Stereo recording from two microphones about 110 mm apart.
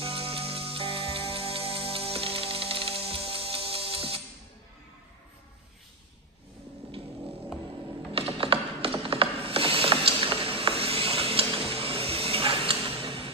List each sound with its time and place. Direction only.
0.0 s music: 60° right (ahead or behind)
8.1 s ratchet: 55° right (ahead or behind)